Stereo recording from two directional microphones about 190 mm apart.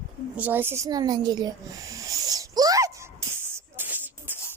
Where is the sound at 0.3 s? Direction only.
10° right (ahead or behind).